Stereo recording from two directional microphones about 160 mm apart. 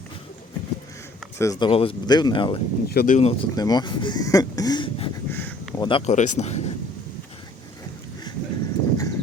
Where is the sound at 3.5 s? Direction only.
25° left (ahead or behind).